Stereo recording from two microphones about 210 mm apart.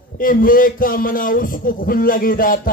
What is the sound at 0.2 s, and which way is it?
Speech, 40° left (ahead or behind).